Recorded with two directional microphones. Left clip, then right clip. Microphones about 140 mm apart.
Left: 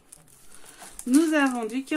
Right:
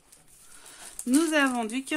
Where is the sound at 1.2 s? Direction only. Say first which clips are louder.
Left 2 dB; 35° right (ahead or behind).